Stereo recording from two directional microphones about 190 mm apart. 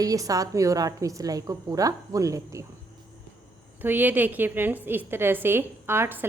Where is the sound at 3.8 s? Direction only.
10° right (ahead or behind).